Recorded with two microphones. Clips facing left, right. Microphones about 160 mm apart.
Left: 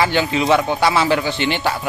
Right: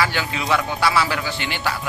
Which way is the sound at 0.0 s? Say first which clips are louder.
Left 6 dB; 25° left (ahead or behind).